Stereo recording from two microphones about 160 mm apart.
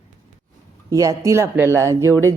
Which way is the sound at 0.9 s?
20° right (ahead or behind).